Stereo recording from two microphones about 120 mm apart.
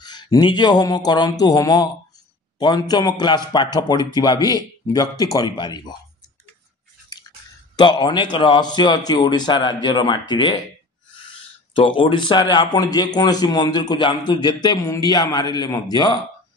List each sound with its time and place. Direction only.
0.0 s a man's voice: 35° left (ahead or behind)
7.7 s a man's voice: 40° left (ahead or behind)
11.7 s a man's voice: 45° left (ahead or behind)